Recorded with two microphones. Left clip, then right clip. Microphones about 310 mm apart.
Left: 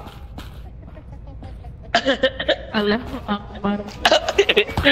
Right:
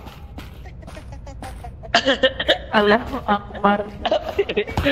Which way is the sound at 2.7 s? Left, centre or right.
Centre.